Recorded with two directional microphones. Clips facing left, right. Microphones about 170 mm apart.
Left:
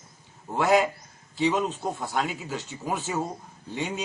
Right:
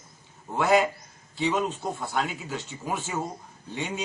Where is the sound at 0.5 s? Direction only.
Centre (ahead or behind).